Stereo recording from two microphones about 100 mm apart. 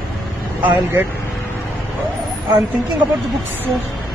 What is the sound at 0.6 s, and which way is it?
Speech, 15° right (ahead or behind).